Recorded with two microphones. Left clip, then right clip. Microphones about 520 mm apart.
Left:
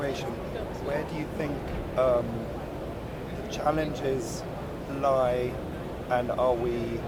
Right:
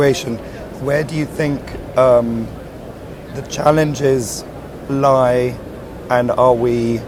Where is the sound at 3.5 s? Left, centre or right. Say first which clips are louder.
Right 14 dB; right.